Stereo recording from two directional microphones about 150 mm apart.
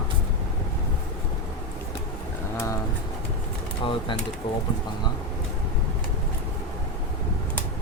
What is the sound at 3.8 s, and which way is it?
Speech, 35° left (ahead or behind).